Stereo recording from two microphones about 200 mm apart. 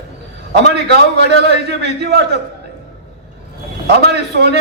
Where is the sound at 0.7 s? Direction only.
55° right (ahead or behind).